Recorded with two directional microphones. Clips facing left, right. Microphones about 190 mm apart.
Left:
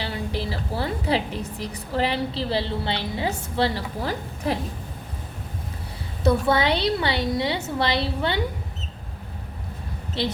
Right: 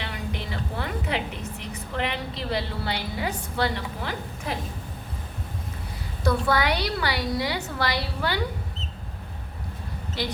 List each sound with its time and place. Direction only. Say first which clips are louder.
0.0 s a woman's voice: left 5 dB; 35° left (ahead or behind)
6.2 s a woman's voice: left 3 dB; 25° left (ahead or behind)
10.2 s a woman's voice: left 4 dB; 25° left (ahead or behind)